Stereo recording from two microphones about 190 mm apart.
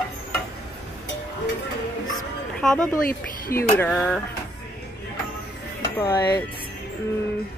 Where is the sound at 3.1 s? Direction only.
50° left (ahead or behind).